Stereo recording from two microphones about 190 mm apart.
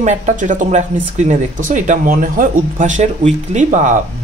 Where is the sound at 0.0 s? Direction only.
40° right (ahead or behind).